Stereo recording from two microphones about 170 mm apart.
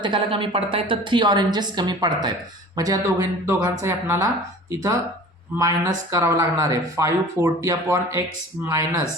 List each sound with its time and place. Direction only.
0.0 s a woman's voice: 30° right (ahead or behind)
5.5 s speech: 20° right (ahead or behind)